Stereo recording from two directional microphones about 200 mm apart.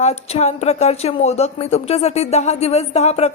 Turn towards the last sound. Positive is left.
turn(degrees=35)  # may be behind; listen again after turning